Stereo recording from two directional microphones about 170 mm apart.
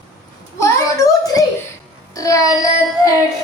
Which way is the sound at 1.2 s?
20° left (ahead or behind).